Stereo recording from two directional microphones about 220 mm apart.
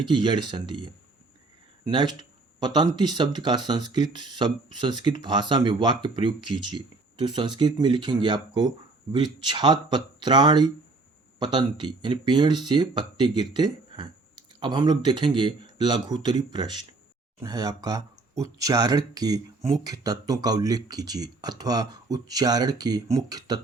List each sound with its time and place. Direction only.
0.0 s speech: 20° right (ahead or behind)